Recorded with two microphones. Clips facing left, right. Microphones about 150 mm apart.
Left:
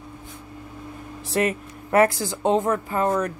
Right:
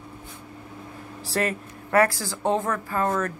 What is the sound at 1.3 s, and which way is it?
A woman's voice, 20° left (ahead or behind).